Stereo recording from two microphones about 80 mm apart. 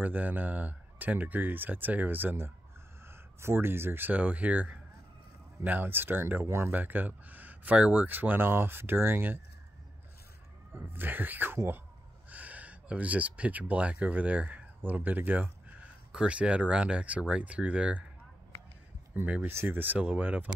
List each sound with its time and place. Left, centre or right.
0.0 s speech: right
6.7 s speech: right
10.7 s speech: right
12.3 s speech: centre
19.4 s speech: right